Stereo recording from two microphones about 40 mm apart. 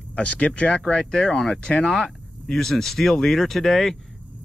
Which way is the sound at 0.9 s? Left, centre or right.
Centre.